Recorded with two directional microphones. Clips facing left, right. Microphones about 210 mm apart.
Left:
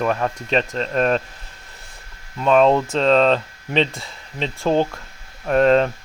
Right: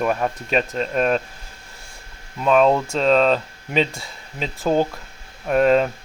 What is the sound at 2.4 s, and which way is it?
Speech, 5° right (ahead or behind).